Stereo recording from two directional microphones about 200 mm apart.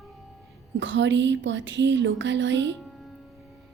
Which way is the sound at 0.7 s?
65° right (ahead or behind).